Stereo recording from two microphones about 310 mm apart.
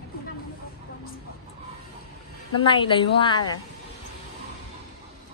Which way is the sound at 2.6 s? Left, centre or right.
Centre.